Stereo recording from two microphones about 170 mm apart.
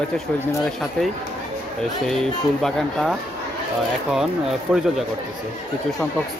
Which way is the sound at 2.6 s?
Centre (ahead or behind).